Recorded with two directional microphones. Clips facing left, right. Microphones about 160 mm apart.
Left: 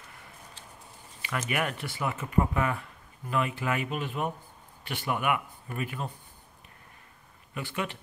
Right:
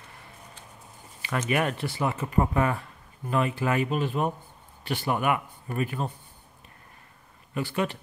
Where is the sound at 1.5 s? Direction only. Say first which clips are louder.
Right 6 dB; 35° right (ahead or behind).